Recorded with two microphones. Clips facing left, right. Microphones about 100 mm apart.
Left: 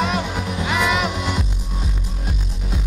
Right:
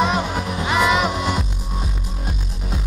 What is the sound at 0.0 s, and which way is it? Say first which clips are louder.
Music: right 2 dB; 20° right (ahead or behind).